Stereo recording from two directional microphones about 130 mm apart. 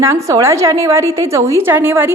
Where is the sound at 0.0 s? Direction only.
20° right (ahead or behind).